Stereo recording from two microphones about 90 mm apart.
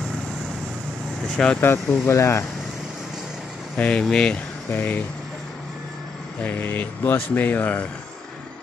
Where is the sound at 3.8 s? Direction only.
15° left (ahead or behind).